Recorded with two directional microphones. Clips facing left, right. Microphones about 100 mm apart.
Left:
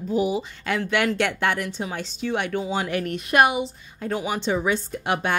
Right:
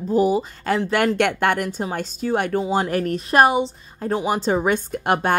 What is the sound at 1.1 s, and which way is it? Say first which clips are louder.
A woman's voice: right 4 dB; 55° right (ahead or behind).